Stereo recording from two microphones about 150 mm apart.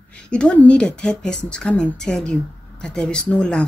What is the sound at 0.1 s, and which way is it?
A woman's voice, 5° left (ahead or behind).